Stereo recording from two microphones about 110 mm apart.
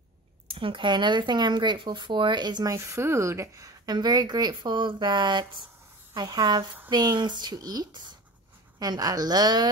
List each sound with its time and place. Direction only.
0.5 s speech: 50° right (ahead or behind)
2.7 s speech: 25° right (ahead or behind)